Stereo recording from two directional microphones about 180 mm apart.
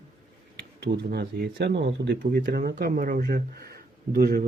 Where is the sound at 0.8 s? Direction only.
65° right (ahead or behind).